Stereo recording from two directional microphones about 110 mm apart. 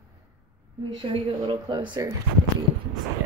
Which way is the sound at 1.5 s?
45° right (ahead or behind).